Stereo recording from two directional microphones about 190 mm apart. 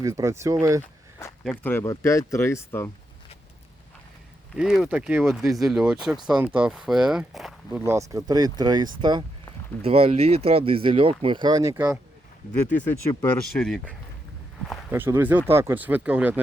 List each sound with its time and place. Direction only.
0.0 s speech: 15° right (ahead or behind)
1.5 s speech: 10° left (ahead or behind)
4.5 s speech: centre (ahead or behind)
7.8 s speech: 15° right (ahead or behind)
13.4 s speech: 5° left (ahead or behind)
14.8 s speech: 10° right (ahead or behind)